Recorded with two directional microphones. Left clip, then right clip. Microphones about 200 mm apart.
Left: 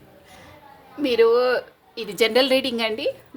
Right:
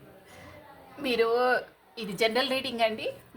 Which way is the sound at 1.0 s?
40° left (ahead or behind).